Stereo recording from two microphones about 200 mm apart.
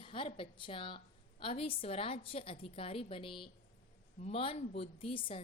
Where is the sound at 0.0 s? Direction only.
25° left (ahead or behind).